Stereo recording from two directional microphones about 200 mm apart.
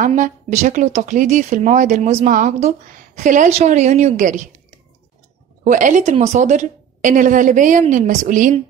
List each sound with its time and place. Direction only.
0.0 s a woman's voice: 40° right (ahead or behind)
5.6 s a woman's voice: 40° right (ahead or behind)